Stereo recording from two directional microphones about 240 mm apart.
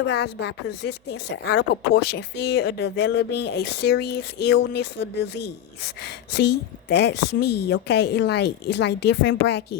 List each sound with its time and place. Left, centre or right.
0.0 s speech: left